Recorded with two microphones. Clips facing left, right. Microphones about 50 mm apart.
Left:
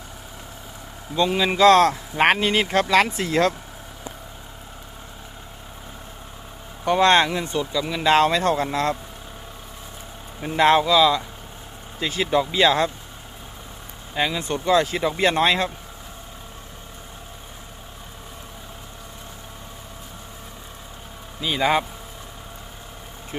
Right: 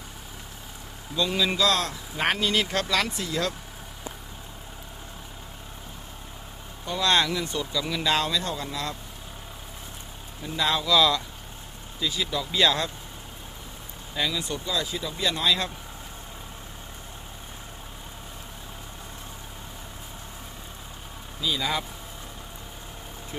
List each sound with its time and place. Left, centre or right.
1.3 s speech: left
1.5 s speech: left
6.8 s speech: left
7.6 s speech: centre
8.0 s speech: left
10.4 s speech: left
10.8 s speech: centre
11.9 s speech: left
12.5 s speech: left
14.2 s speech: left
21.4 s speech: left
23.3 s speech: left